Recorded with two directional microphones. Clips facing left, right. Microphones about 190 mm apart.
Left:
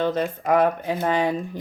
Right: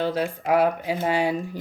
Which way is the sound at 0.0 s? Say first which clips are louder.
Left 2 dB; 10° right (ahead or behind).